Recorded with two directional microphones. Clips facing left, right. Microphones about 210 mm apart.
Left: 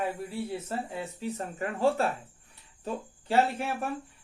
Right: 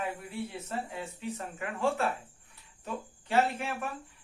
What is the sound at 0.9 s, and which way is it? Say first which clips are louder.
A man's voice: left 3 dB; 35° left (ahead or behind).